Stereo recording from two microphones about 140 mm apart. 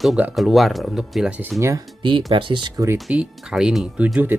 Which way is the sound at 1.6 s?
20° right (ahead or behind).